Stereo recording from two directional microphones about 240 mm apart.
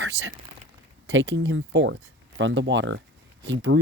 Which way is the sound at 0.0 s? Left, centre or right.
Right.